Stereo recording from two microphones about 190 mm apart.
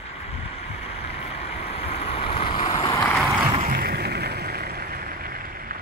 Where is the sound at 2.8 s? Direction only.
15° left (ahead or behind).